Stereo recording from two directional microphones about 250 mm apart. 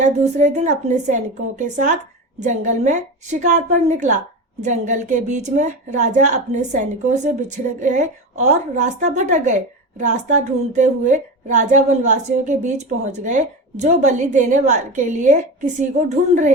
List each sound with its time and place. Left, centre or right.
0.0 s a woman's voice: right